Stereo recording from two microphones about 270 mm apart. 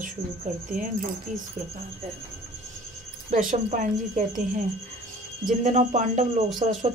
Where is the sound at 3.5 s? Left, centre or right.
Right.